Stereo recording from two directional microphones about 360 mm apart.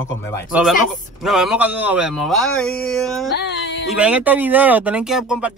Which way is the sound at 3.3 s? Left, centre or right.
Left.